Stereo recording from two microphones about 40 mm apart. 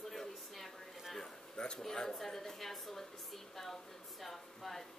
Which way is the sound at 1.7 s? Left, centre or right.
Centre.